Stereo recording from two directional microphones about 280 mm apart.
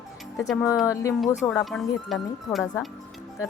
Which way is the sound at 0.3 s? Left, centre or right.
Centre.